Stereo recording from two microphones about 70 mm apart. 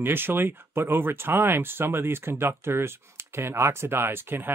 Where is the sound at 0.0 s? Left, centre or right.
Right.